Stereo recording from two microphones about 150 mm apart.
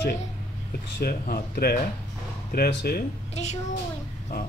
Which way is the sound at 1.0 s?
75° left (ahead or behind).